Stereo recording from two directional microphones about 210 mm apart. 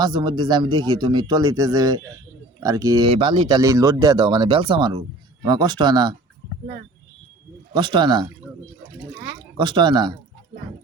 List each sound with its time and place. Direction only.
0.0 s speech: 20° right (ahead or behind)
7.7 s speech: 20° right (ahead or behind)
9.6 s speech: 20° right (ahead or behind)